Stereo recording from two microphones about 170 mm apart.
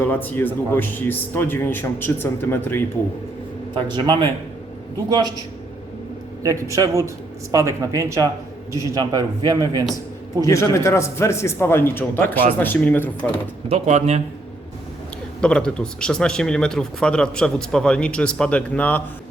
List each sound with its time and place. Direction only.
0.0 s a man's voice: 10° left (ahead or behind)
3.8 s a man's voice: 30° right (ahead or behind)
6.4 s a man's voice: 20° right (ahead or behind)
10.4 s a man's voice: 15° left (ahead or behind)
13.7 s speech: 40° right (ahead or behind)
15.4 s speech: 5° left (ahead or behind)